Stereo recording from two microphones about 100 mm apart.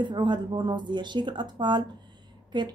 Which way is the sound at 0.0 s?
50° right (ahead or behind).